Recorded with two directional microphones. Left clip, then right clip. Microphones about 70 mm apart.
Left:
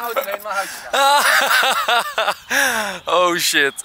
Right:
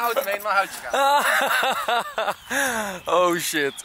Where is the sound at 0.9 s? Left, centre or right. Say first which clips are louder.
Left 5 dB; centre.